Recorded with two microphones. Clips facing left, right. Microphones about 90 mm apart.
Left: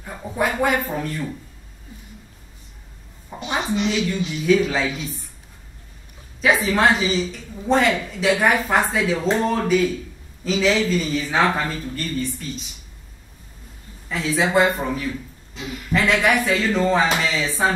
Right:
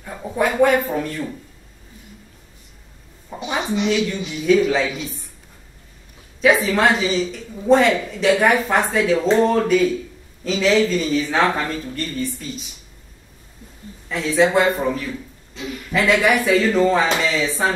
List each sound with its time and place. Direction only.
0.0 s speech: centre (ahead or behind)
3.3 s a sound: 5° left (ahead or behind)
3.6 s speech: 15° right (ahead or behind)
4.5 s speech: centre (ahead or behind)
6.4 s speech: centre (ahead or behind)
14.0 s speech: centre (ahead or behind)
15.5 s speech: 15° left (ahead or behind)
15.9 s speech: centre (ahead or behind)